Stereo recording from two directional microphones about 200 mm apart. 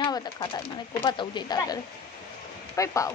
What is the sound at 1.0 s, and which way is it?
Speech, 25° left (ahead or behind).